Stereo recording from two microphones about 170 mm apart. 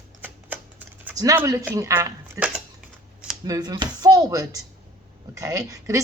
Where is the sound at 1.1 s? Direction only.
20° right (ahead or behind).